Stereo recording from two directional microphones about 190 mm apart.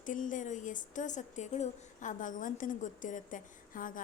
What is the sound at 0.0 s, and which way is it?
A woman's voice, 45° left (ahead or behind).